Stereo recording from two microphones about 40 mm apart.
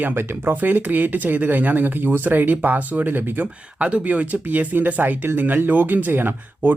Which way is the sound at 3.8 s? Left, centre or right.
Right.